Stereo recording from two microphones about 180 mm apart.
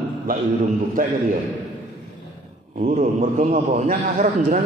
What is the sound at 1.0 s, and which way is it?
Speech, 50° right (ahead or behind).